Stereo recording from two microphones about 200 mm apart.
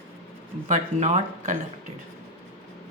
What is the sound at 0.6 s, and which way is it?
Speech, 35° right (ahead or behind).